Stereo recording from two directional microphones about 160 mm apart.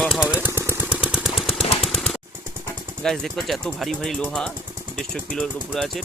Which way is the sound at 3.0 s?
Centre (ahead or behind).